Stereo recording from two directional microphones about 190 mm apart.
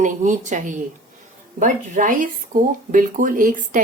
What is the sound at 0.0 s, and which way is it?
Speech, 40° right (ahead or behind).